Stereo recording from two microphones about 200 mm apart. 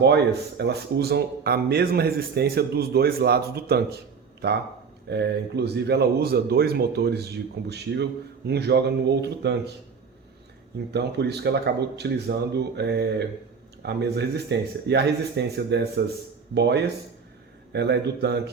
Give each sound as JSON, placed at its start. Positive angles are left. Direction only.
{"t": 0.0, "sound": "speech", "side_deg": -55}
{"t": 10.9, "sound": "speech", "side_deg": -55}